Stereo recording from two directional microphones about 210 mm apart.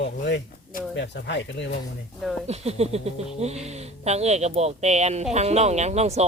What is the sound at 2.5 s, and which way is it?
Speech, 30° right (ahead or behind).